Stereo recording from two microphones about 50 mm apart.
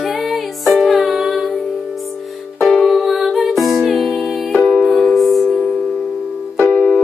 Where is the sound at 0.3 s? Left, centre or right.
Centre.